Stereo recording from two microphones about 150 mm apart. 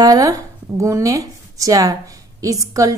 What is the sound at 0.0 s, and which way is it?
A woman's voice, 25° right (ahead or behind).